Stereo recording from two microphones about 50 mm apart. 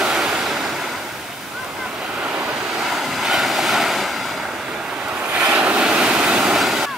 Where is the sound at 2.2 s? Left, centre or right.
Right.